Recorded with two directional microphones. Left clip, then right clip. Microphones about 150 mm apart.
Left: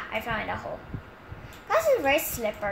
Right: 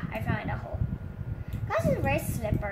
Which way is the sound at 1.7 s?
15° left (ahead or behind).